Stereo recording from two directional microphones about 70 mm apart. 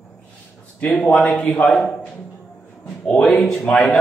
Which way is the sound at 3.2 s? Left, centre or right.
Centre.